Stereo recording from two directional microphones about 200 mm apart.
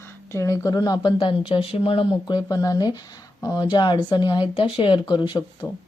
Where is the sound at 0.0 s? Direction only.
15° left (ahead or behind).